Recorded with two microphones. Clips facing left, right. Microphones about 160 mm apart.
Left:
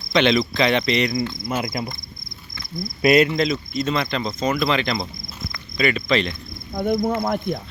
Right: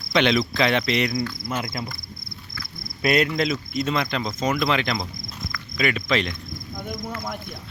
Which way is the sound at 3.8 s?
5° right (ahead or behind).